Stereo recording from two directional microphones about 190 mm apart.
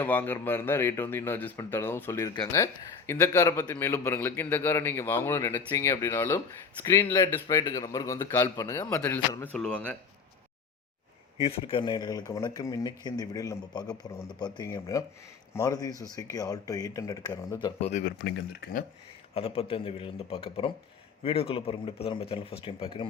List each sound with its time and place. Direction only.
0.0 s a man's voice: 10° left (ahead or behind)
11.4 s speech: 30° left (ahead or behind)
18.2 s speech: 55° left (ahead or behind)
19.3 s speech: 30° left (ahead or behind)